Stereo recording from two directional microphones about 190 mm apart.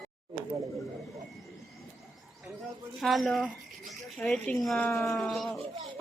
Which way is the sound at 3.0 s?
Centre (ahead or behind).